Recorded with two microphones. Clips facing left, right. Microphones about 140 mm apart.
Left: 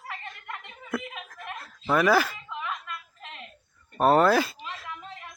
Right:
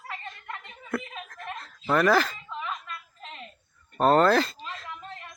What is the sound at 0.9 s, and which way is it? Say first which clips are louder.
Snicker: even; 5° left (ahead or behind).